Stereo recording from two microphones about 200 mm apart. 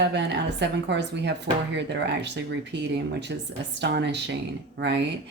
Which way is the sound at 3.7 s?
60° right (ahead or behind).